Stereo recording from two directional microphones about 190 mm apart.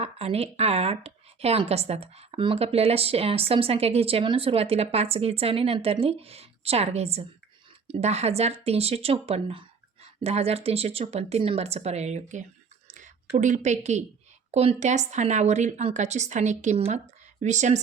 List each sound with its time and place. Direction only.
0.0 s a woman's voice: 30° right (ahead or behind)